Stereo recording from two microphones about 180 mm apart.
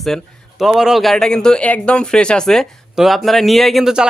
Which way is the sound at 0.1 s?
Centre (ahead or behind).